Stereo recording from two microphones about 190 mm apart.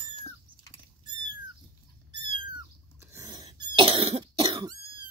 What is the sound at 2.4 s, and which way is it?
Cat, 25° right (ahead or behind).